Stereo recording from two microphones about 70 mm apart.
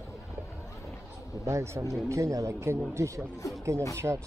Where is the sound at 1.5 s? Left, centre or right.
Right.